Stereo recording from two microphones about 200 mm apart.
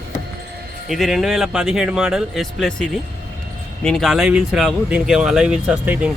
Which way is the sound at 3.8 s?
Centre (ahead or behind).